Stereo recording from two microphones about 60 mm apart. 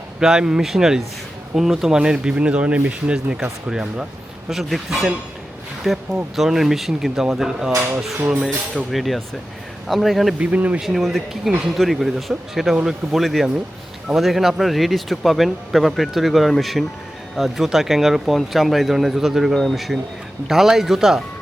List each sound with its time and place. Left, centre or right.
0.2 s speech: centre
4.4 s speech: centre
8.7 s speech: centre
10.3 s speech: right
10.8 s speech: centre